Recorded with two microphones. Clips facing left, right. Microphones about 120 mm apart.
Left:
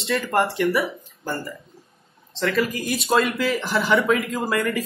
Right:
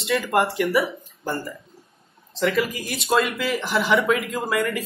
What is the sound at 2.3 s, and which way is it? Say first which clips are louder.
Speech: even; centre (ahead or behind).